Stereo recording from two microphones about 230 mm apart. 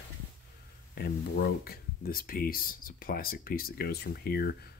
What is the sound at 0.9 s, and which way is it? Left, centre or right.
Speech, left.